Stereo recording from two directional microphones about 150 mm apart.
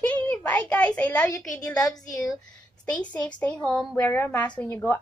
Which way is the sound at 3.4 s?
10° left (ahead or behind).